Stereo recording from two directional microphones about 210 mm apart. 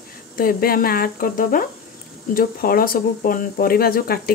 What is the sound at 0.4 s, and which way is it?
Speech, 45° left (ahead or behind).